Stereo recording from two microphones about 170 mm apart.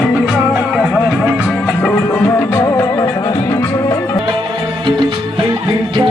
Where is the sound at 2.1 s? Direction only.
10° left (ahead or behind).